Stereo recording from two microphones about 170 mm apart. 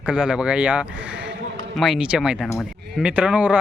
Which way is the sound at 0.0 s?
5° right (ahead or behind).